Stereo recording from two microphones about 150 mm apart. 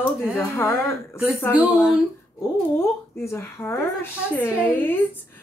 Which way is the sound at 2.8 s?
20° left (ahead or behind).